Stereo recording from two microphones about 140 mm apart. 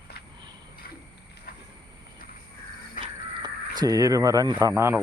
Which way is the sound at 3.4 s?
25° right (ahead or behind).